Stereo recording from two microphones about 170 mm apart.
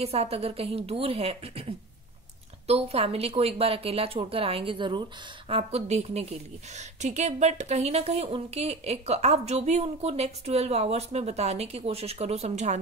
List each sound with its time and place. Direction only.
0.0 s speech: 35° right (ahead or behind)